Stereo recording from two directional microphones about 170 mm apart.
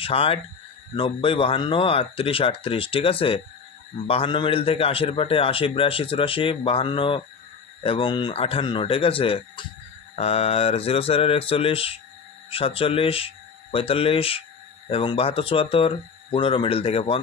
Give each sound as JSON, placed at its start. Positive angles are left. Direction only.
{"t": 0.0, "sound": "a man's voice", "side_deg": 35}